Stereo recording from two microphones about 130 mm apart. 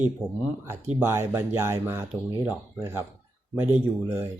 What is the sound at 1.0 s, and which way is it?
Speech, 20° right (ahead or behind).